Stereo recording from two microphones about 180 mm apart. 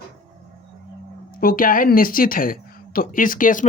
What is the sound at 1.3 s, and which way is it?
Speech, 55° left (ahead or behind).